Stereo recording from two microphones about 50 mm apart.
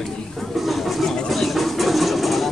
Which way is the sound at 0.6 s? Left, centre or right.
Centre.